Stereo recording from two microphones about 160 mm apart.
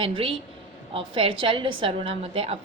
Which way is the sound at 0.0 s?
35° right (ahead or behind).